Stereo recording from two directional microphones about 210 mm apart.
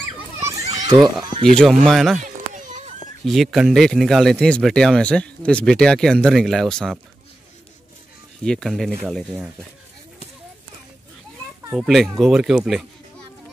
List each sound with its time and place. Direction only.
0.4 s children playing: 15° right (ahead or behind)
1.4 s speech: 5° left (ahead or behind)
2.2 s children playing: 35° right (ahead or behind)
3.3 s speech: centre (ahead or behind)
8.5 s speech: centre (ahead or behind)
11.7 s speech: centre (ahead or behind)